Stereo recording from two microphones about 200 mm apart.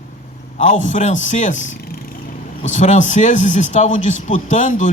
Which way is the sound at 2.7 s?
40° left (ahead or behind).